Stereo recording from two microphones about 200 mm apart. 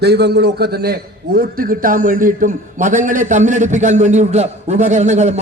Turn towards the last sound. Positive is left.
turn(degrees=-35)  # may be behind; listen again after turning